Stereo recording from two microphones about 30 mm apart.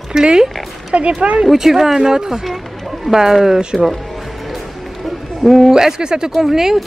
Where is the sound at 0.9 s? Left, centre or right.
Right.